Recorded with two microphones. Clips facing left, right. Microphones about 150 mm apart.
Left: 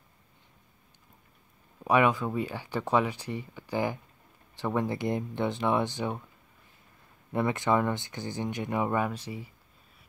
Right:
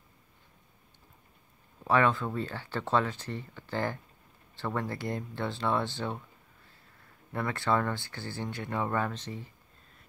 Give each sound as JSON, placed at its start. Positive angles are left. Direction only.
{"t": 1.9, "sound": "speech", "side_deg": 15}
{"t": 7.3, "sound": "speech", "side_deg": 20}